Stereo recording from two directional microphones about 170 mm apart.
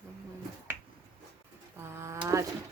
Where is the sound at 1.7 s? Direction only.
15° right (ahead or behind).